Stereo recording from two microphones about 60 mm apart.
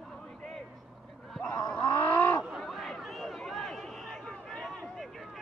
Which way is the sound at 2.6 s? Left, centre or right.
Centre.